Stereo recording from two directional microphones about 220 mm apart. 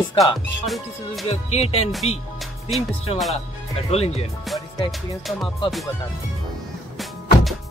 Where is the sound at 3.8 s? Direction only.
30° left (ahead or behind).